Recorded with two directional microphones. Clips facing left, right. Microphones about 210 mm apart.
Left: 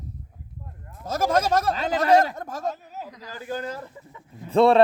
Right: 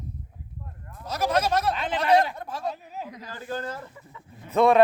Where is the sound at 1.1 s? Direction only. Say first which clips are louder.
Left 2 dB; 45° left (ahead or behind).